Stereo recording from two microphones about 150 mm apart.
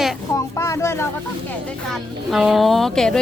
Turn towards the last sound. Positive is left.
turn(degrees=5)  # may be behind; listen again after turning